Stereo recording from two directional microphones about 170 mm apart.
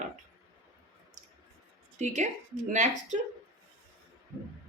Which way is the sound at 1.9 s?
45° right (ahead or behind).